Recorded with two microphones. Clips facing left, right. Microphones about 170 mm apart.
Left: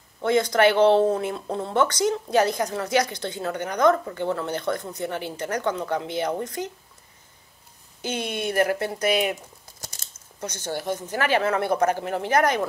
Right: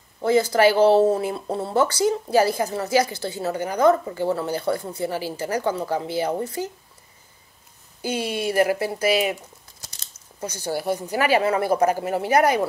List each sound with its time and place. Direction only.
0.2 s speech: 5° right (ahead or behind)
8.0 s speech: 10° right (ahead or behind)
9.8 s biting: 50° left (ahead or behind)
10.4 s speech: 10° right (ahead or behind)